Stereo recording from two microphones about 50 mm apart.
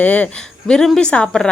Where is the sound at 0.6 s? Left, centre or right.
Centre.